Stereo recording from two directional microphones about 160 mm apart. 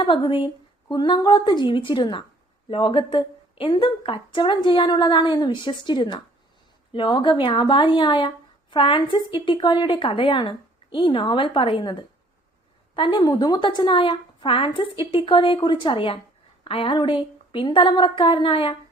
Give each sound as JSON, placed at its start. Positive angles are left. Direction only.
{"t": 0.0, "sound": "a woman's voice", "side_deg": 30}